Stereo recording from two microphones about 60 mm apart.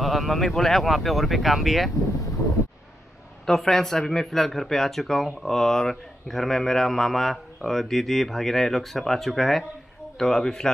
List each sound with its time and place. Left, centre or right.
0.0 s speech: centre
3.4 s a man's voice: centre